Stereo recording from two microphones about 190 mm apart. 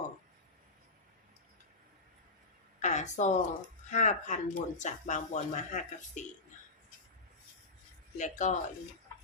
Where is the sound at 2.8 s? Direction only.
40° left (ahead or behind).